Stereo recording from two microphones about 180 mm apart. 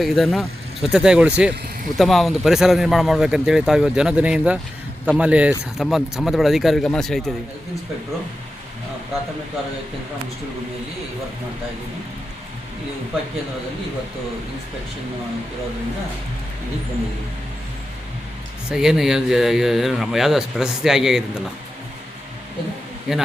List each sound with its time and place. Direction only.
0.0 s speech: centre (ahead or behind)
18.7 s speech: centre (ahead or behind)
23.1 s speech: 5° right (ahead or behind)